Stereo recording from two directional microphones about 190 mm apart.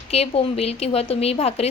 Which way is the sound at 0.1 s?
30° left (ahead or behind).